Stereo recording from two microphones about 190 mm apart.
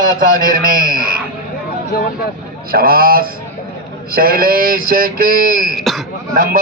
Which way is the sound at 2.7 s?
50° right (ahead or behind).